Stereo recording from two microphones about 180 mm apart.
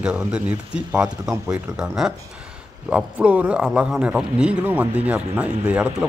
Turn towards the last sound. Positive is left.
turn(degrees=-10)  # may be behind; listen again after turning